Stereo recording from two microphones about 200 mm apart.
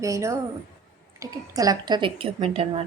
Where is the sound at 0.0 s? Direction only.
15° right (ahead or behind).